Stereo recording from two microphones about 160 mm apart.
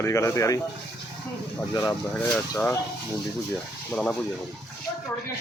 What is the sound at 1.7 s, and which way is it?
Speech, 20° left (ahead or behind).